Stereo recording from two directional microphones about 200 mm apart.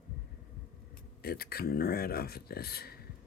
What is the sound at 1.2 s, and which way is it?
Speech, 50° left (ahead or behind).